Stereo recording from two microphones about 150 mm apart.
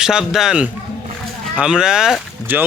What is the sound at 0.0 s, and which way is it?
Speech, 5° right (ahead or behind).